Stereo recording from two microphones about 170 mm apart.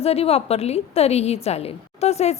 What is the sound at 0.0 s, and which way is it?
A woman's voice, 35° left (ahead or behind).